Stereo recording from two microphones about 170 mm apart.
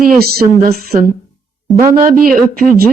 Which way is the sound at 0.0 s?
60° right (ahead or behind).